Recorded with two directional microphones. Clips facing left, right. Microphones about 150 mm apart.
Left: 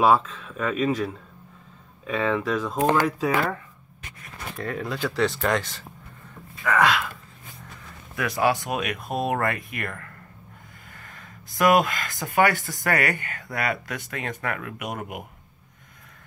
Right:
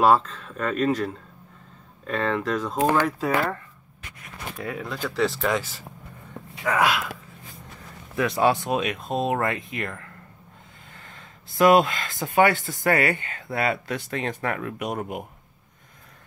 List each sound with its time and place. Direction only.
0.0 s speech: centre (ahead or behind)
4.6 s speech: 5° right (ahead or behind)
8.2 s speech: 25° right (ahead or behind)